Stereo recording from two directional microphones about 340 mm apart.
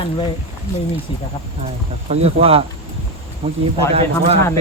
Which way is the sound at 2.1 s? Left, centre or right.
Centre.